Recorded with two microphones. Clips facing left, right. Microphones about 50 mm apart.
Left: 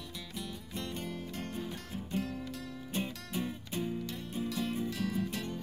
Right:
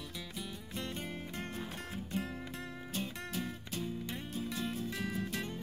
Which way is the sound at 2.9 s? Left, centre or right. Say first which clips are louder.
Left 3 dB; centre.